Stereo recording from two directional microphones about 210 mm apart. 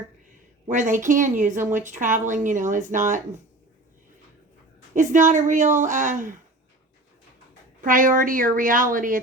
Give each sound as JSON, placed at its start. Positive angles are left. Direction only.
{"t": 0.7, "sound": "a woman's voice", "side_deg": -35}
{"t": 4.9, "sound": "a woman's voice", "side_deg": -35}
{"t": 7.8, "sound": "a woman's voice", "side_deg": -40}